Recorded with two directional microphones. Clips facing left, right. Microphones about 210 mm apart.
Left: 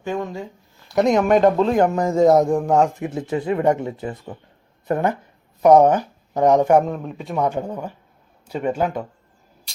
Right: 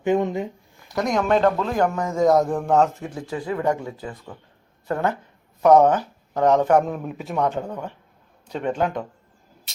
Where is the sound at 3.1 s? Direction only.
25° left (ahead or behind).